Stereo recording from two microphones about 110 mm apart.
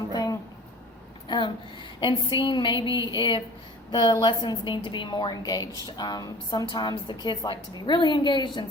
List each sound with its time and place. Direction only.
0.1 s a sound: 35° left (ahead or behind)
1.3 s a woman's voice: 45° left (ahead or behind)
2.0 s music: 45° left (ahead or behind)
3.9 s a woman's voice: 40° left (ahead or behind)
6.7 s music: 45° left (ahead or behind)